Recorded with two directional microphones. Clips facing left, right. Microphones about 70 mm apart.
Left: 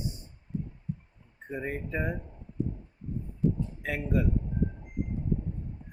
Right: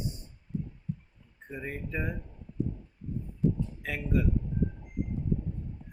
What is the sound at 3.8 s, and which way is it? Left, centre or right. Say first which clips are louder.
Speech: left 1 dB; left.